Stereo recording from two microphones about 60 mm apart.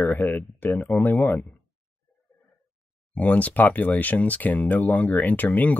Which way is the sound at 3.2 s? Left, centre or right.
Left.